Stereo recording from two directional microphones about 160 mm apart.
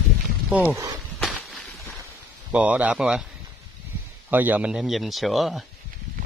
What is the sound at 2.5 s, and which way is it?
Speech, 10° right (ahead or behind).